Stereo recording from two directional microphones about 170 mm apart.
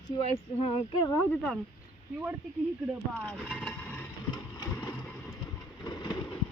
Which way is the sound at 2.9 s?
5° left (ahead or behind).